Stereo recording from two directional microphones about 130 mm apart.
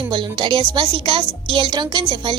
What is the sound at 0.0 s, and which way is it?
A woman's voice, 35° right (ahead or behind).